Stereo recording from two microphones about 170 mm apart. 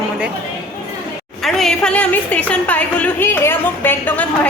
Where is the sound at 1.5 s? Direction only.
Centre (ahead or behind).